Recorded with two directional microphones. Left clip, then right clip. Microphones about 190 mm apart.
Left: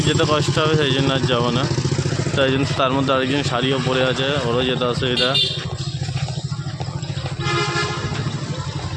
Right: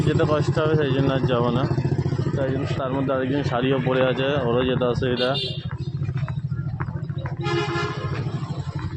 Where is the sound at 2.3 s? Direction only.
35° left (ahead or behind).